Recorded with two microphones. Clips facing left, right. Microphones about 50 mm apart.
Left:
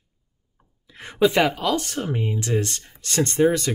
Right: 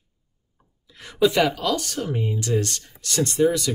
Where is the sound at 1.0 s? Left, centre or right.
Left.